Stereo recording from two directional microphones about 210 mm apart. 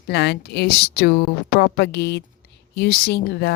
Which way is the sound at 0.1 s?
50° left (ahead or behind).